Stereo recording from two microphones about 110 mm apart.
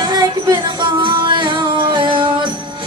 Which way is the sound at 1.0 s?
45° right (ahead or behind).